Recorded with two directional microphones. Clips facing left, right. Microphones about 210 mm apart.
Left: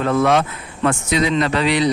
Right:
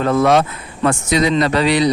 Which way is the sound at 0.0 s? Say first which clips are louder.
Right 2 dB; 40° right (ahead or behind).